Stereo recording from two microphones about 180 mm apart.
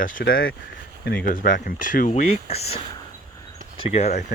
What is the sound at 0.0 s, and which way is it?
Speech, 50° left (ahead or behind).